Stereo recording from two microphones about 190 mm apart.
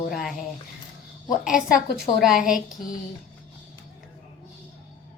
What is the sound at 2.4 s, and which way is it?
Speech, 45° left (ahead or behind).